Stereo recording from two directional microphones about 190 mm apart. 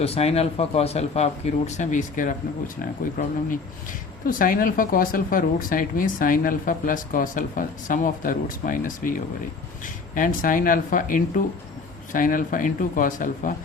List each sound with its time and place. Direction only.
0.0 s speech: 30° left (ahead or behind)